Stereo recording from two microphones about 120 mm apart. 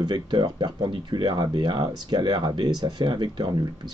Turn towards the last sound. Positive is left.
turn(degrees=-40)  # may be behind; listen again after turning